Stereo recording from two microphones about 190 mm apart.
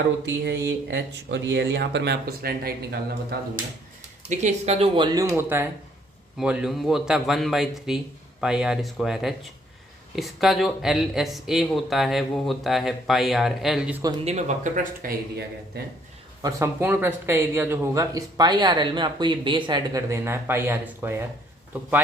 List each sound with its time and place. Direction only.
0.3 s speech: 65° right (ahead or behind)
4.3 s speech: 35° right (ahead or behind)
5.3 s speech: 10° right (ahead or behind)
14.3 s speech: 40° right (ahead or behind)
16.4 s speech: 15° right (ahead or behind)